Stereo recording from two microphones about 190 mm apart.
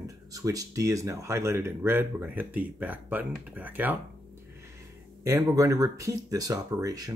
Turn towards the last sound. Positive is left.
turn(degrees=-20)  # may be behind; listen again after turning